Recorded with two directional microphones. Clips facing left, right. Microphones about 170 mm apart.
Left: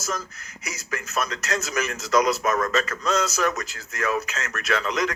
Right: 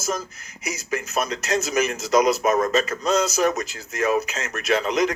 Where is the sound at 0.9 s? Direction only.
20° right (ahead or behind).